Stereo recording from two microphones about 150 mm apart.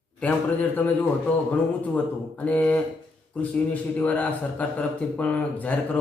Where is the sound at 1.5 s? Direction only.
10° left (ahead or behind).